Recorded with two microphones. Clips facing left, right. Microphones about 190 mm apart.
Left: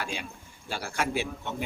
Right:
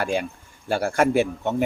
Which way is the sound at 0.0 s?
50° right (ahead or behind).